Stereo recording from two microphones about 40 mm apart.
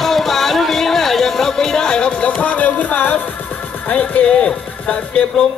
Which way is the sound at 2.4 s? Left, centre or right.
Left.